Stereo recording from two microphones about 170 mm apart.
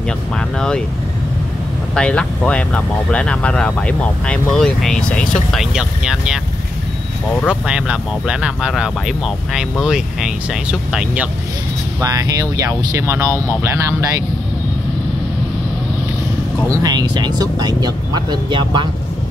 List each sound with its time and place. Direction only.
0.6 s speech: 5° left (ahead or behind)
2.0 s speech: 5° left (ahead or behind)
7.4 s speech: 5° right (ahead or behind)
12.0 s speech: 20° right (ahead or behind)
16.7 s speech: 25° right (ahead or behind)